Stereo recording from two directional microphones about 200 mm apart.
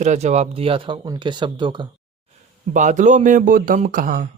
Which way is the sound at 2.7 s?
40° right (ahead or behind).